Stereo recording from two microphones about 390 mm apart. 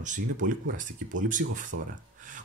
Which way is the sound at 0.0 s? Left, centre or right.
Centre.